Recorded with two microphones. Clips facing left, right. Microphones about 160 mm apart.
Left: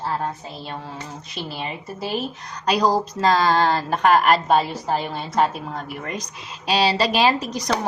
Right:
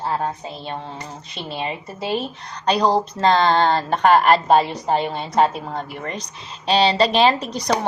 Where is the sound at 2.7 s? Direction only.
30° right (ahead or behind).